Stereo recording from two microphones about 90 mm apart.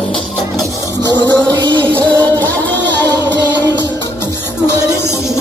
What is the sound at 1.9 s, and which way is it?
Music, 15° left (ahead or behind).